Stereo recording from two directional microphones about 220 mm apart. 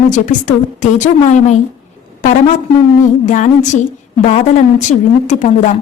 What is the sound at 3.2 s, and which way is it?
A woman's voice, 35° left (ahead or behind).